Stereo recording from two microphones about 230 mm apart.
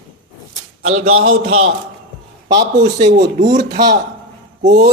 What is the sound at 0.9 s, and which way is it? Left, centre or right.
Speech, right.